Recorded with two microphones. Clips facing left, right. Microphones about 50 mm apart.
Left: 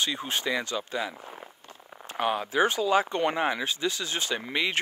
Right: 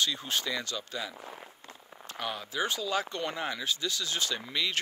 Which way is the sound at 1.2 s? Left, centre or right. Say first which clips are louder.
Left 2 dB; centre.